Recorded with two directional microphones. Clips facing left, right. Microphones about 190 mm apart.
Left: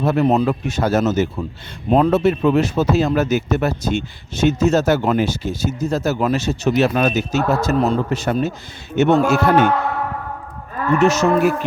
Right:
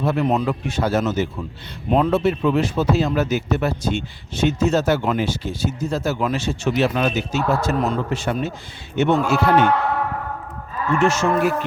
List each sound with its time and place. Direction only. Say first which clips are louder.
0.0 s speech: left 4 dB; 40° left (ahead or behind)
10.9 s moo: left 3 dB; 40° left (ahead or behind)